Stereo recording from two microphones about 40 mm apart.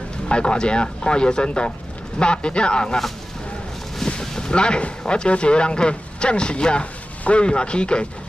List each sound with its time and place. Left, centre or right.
0.3 s speech: left
4.2 s speech: centre